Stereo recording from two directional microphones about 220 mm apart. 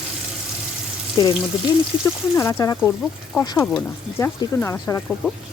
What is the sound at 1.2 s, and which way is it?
Speech, 15° left (ahead or behind).